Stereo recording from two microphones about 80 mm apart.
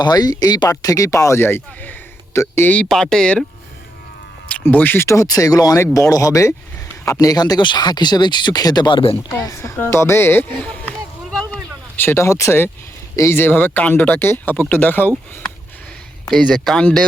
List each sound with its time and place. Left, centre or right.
0.0 s speech: left
2.9 s speech: centre
4.6 s speech: left
5.0 s speech: left
7.6 s speech: left
9.5 s speech: left
11.5 s a sound: left
13.1 s speech: left
16.3 s speech: centre